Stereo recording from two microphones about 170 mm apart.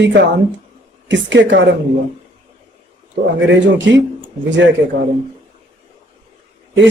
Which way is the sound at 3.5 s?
90° right.